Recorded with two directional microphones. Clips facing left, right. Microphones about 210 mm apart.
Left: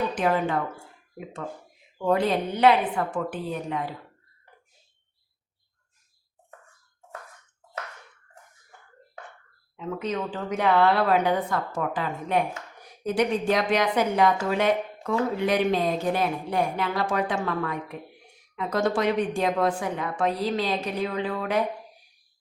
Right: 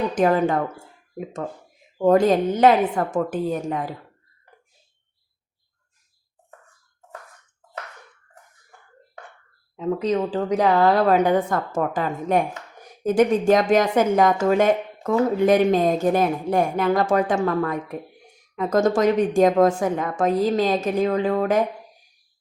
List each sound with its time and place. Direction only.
0.1 s a woman's voice: 40° right (ahead or behind)
9.7 s a woman's voice: 35° right (ahead or behind)